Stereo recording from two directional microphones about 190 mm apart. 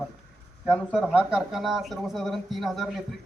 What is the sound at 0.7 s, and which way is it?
A man's voice, 5° left (ahead or behind).